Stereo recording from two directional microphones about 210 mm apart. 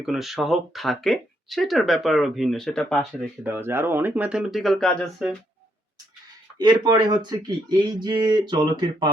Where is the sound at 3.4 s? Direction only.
10° right (ahead or behind).